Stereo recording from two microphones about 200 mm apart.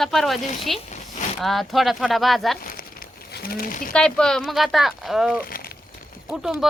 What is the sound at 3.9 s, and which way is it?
Speech, 5° left (ahead or behind).